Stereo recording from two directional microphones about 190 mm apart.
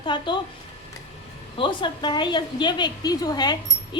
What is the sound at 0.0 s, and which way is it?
Speech, 25° left (ahead or behind).